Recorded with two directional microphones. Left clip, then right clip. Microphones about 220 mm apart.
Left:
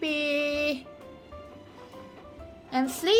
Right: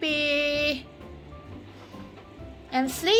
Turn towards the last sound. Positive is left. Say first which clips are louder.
# right 1 dB
turn(degrees=20)  # may be behind; listen again after turning